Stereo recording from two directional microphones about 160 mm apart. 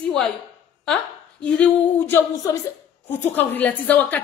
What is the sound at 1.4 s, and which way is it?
Speech, 10° left (ahead or behind).